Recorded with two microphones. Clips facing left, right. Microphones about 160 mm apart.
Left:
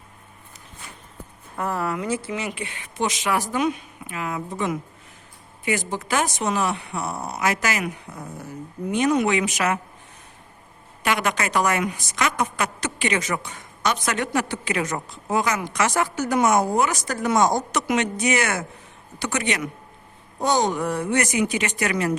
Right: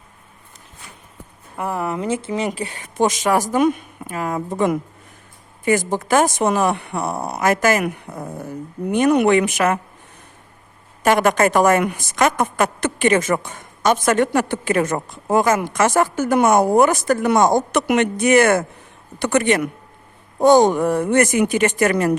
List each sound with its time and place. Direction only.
1.5 s speech: 15° right (ahead or behind)
2.5 s a woman's voice: 40° right (ahead or behind)
11.0 s a woman's voice: 45° right (ahead or behind)